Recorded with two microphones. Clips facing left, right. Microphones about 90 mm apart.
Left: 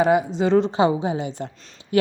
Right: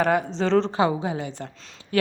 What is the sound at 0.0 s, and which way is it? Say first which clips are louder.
A woman's voice: left 3 dB; 10° left (ahead or behind).